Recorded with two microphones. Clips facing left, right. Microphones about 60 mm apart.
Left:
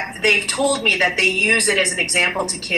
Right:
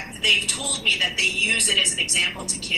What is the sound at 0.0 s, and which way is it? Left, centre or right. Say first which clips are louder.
A woman's voice: left 5 dB; left.